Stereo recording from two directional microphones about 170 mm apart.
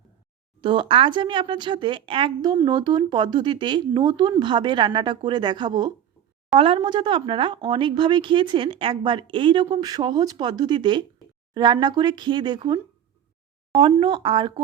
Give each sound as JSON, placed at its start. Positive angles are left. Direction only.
{"t": 0.6, "sound": "speech", "side_deg": -30}
{"t": 14.0, "sound": "speech", "side_deg": -30}